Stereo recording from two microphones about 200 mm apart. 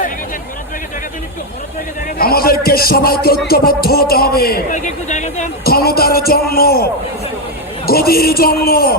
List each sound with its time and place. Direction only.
2.1 s a sound: 50° left (ahead or behind)
3.4 s a man's voice: 50° left (ahead or behind)
7.9 s a man's voice: 50° left (ahead or behind)